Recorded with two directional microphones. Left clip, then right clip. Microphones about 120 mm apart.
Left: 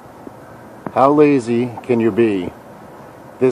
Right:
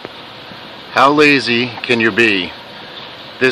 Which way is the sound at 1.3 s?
35° left (ahead or behind).